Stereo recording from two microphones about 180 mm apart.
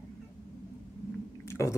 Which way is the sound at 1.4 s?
15° left (ahead or behind).